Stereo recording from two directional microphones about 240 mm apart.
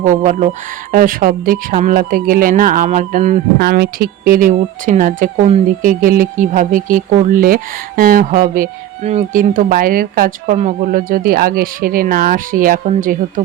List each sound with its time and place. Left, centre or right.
0.0 s speech: right